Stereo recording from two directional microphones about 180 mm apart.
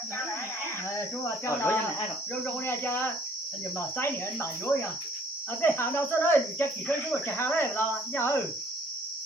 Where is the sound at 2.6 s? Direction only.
15° left (ahead or behind).